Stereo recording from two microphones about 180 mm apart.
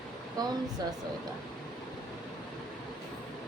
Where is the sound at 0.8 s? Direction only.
20° right (ahead or behind).